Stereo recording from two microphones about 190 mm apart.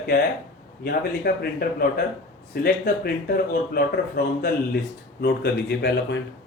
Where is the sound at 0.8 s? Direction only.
55° left (ahead or behind).